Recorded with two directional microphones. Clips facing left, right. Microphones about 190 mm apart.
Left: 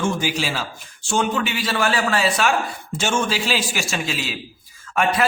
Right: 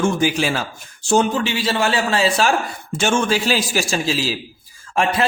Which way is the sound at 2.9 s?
55° right (ahead or behind).